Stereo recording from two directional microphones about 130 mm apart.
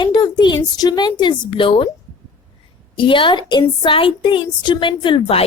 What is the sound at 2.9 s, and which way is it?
A woman's voice, 40° left (ahead or behind).